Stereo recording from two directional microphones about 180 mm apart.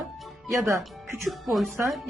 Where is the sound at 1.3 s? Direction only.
Centre (ahead or behind).